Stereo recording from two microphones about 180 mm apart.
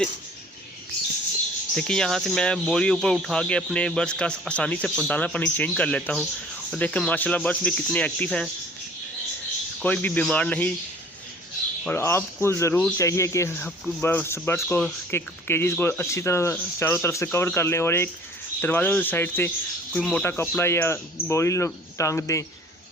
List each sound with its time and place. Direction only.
1.7 s speech: 5° left (ahead or behind)
9.8 s speech: 10° left (ahead or behind)
11.9 s speech: 15° left (ahead or behind)